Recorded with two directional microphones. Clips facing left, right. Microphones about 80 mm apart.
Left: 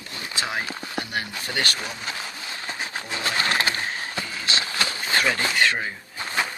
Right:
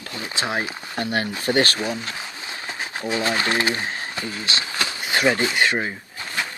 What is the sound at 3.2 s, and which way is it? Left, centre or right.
Speech, right.